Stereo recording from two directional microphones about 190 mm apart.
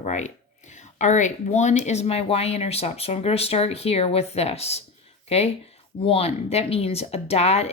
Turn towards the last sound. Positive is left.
turn(degrees=35)  # may be behind; listen again after turning